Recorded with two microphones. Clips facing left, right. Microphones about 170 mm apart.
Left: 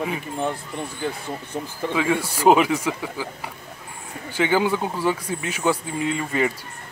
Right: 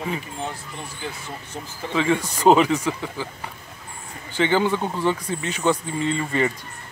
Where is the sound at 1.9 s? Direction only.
10° left (ahead or behind).